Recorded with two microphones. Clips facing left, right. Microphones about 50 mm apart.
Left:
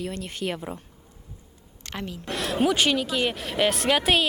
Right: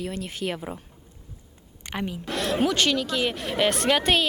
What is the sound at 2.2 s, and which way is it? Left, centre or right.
Speech, centre.